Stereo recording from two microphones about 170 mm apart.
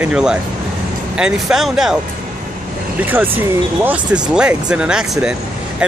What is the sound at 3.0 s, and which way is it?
Speech, 10° right (ahead or behind).